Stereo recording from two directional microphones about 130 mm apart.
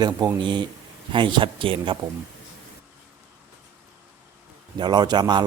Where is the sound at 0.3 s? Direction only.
40° right (ahead or behind).